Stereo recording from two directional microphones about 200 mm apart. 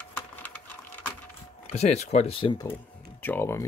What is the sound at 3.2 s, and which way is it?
Speech, 10° left (ahead or behind).